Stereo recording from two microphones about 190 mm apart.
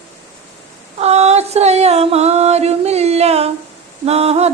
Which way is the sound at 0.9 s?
35° right (ahead or behind).